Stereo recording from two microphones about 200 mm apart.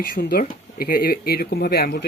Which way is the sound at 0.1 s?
50° left (ahead or behind).